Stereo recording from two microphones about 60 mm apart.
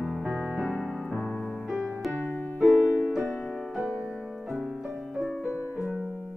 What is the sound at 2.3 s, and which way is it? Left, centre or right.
Music, left.